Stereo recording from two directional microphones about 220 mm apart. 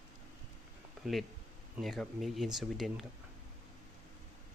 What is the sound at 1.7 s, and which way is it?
Speech, centre (ahead or behind).